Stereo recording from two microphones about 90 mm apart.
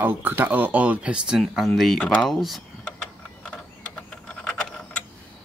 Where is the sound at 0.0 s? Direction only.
20° right (ahead or behind); by 2.6 s centre (ahead or behind).